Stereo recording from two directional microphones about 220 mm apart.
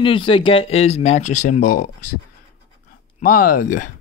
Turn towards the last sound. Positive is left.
turn(degrees=40)  # may be behind; listen again after turning